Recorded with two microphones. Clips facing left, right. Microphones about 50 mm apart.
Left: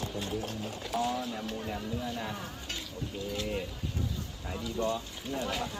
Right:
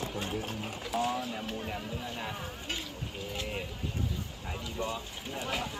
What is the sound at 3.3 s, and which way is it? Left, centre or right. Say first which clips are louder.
Speech: left 3 dB; right.